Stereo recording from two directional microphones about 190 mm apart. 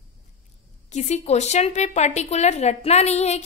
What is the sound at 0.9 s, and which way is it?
A woman's voice, 35° left (ahead or behind).